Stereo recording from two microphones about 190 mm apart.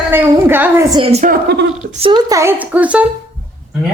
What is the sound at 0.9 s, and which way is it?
Speech, 30° right (ahead or behind).